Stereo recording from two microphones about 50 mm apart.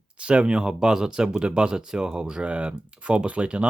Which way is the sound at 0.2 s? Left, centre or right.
Right.